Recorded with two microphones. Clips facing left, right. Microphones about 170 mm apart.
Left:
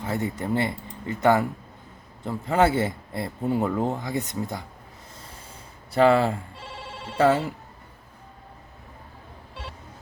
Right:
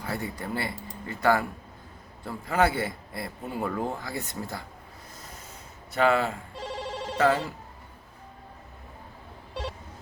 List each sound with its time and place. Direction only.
0.0 s speech: 20° left (ahead or behind)
5.9 s speech: 35° left (ahead or behind)
6.6 s ringtone: 40° right (ahead or behind)
7.2 s speech: 25° left (ahead or behind)